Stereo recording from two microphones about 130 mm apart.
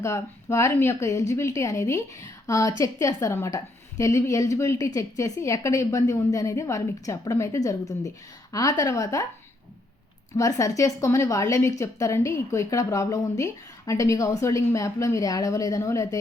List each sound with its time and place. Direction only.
0.0 s a woman's voice: 20° left (ahead or behind)
10.3 s a woman's voice: 25° left (ahead or behind)